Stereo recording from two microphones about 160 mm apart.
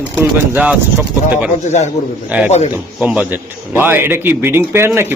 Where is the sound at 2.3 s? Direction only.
10° right (ahead or behind).